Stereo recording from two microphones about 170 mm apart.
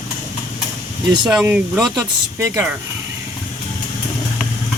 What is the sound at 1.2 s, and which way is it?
Speech, 5° right (ahead or behind).